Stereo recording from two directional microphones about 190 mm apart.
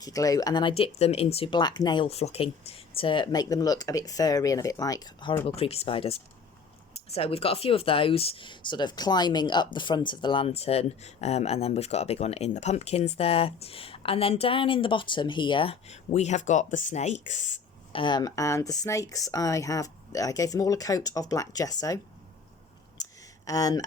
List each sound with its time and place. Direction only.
0.0 s speech: 20° left (ahead or behind)
5.5 s speech: 30° left (ahead or behind)
17.9 s speech: 25° left (ahead or behind)
23.0 s a sound: 20° left (ahead or behind)
23.5 s speech: 20° left (ahead or behind)